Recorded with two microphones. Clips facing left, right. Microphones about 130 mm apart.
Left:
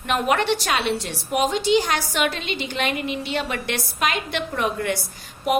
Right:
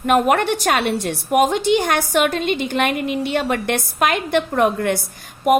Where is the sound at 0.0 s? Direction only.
50° right (ahead or behind).